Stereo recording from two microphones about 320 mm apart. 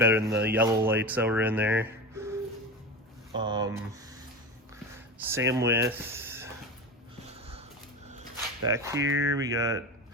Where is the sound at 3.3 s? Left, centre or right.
Centre.